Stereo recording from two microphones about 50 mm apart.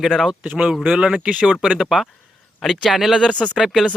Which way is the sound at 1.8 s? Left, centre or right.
Centre.